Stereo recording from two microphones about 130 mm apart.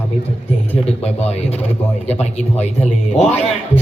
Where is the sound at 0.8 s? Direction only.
55° left (ahead or behind).